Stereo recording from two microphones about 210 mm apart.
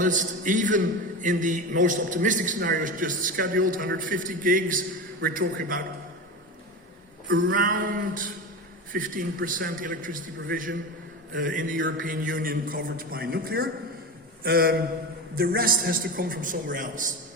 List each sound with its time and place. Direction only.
0.0 s a man's voice: 40° right (ahead or behind)
7.3 s a sound: 70° right (ahead or behind)
7.5 s a man's voice: 40° right (ahead or behind)